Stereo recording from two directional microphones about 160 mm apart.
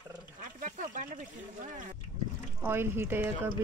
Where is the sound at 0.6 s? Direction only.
55° right (ahead or behind).